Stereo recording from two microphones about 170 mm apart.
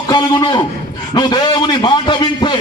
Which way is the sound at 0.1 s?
25° left (ahead or behind).